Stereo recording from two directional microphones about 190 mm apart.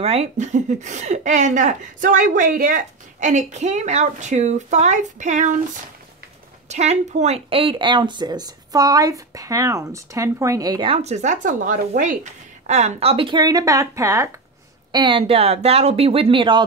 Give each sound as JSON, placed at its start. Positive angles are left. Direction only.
{"t": 0.0, "sound": "speech", "side_deg": -35}
{"t": 6.7, "sound": "speech", "side_deg": -35}